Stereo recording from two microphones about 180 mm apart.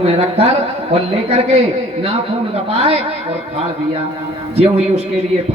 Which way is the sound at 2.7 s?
35° right (ahead or behind).